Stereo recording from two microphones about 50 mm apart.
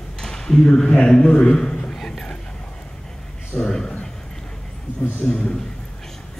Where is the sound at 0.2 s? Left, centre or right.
Centre.